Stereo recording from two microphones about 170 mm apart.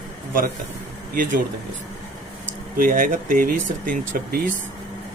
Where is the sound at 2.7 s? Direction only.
55° right (ahead or behind).